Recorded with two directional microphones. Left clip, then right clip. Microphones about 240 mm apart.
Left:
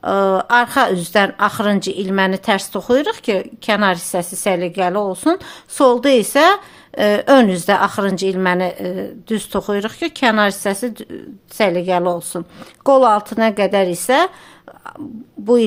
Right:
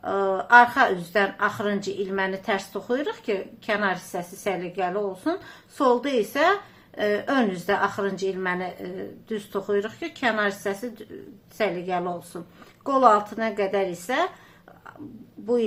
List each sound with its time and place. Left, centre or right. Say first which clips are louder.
0.0 s a woman's voice: left 9 dB; left